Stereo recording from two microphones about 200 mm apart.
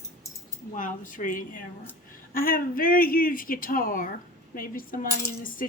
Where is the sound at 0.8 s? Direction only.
40° left (ahead or behind).